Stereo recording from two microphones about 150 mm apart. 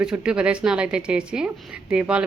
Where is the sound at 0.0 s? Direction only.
5° right (ahead or behind).